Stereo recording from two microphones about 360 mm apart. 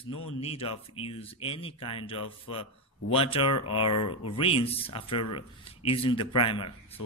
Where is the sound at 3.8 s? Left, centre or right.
Left.